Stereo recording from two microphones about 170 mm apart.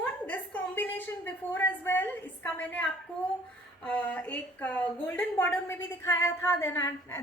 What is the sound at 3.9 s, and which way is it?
A woman's voice, 10° left (ahead or behind).